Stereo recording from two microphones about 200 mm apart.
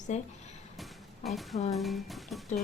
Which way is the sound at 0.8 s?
Centre (ahead or behind).